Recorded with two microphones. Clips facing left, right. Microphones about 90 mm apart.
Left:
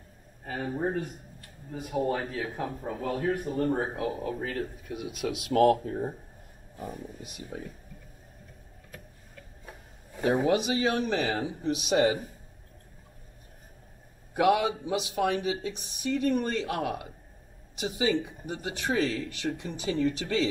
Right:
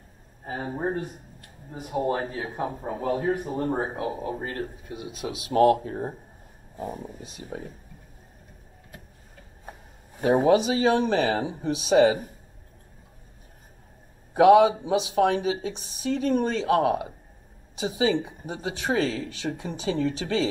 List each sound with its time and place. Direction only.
0.5 s speech: 25° right (ahead or behind)
6.8 s speech: 30° right (ahead or behind)
10.2 s speech: 25° right (ahead or behind)
14.3 s speech: 25° right (ahead or behind)